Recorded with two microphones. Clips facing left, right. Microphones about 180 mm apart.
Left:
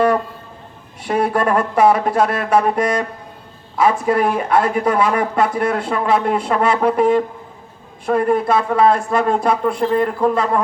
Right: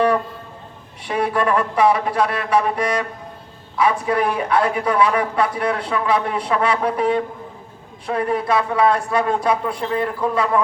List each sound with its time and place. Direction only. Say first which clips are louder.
1.0 s speech: left 3 dB; 45° left (ahead or behind)